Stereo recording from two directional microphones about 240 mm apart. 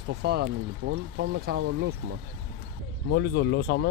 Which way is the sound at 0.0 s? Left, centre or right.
Right.